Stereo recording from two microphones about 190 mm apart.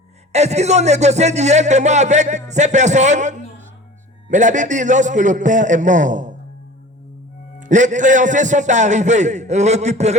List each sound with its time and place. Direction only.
0.3 s speech: 35° right (ahead or behind)
7.6 s speech: 40° right (ahead or behind)